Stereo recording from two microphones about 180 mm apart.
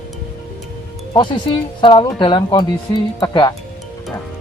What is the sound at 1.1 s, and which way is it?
Speech, 25° left (ahead or behind).